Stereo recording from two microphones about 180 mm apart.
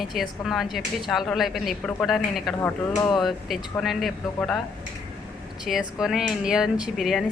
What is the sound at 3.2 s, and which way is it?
Speech, centre (ahead or behind).